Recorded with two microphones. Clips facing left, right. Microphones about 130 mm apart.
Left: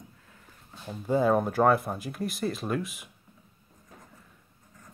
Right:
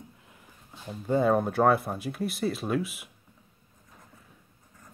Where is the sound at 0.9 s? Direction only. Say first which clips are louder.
Even; centre (ahead or behind).